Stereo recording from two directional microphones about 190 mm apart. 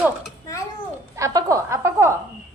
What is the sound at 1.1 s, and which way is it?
A woman's voice, 15° right (ahead or behind).